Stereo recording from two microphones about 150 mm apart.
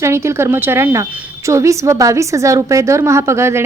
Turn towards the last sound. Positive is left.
turn(degrees=-20)  # may be behind; listen again after turning